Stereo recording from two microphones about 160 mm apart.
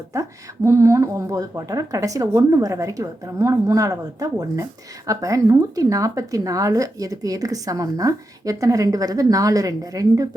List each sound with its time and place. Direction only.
0.1 s speech: 20° right (ahead or behind)